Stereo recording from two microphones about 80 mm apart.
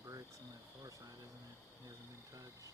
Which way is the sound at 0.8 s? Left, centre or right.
Right.